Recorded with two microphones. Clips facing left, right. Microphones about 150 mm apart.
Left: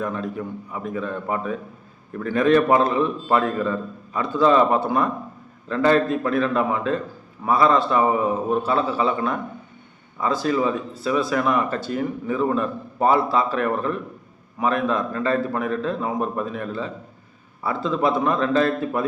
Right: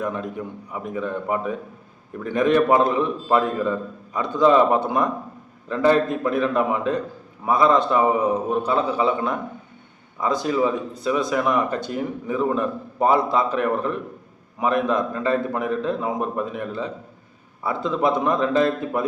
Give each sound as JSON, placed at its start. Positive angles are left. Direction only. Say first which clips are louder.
{"t": 0.7, "sound": "a man's voice", "louder": "right 2 dB", "side_deg": -15}